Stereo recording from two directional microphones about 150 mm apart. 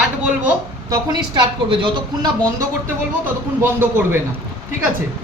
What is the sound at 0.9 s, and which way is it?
A woman's voice, 30° right (ahead or behind).